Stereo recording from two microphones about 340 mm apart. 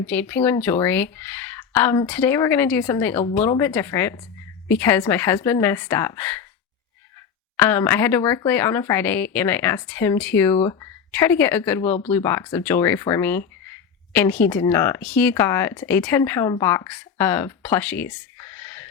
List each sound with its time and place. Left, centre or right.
0.1 s speech: centre
7.5 s speech: centre